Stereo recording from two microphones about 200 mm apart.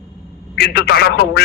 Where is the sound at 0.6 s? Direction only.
55° left (ahead or behind).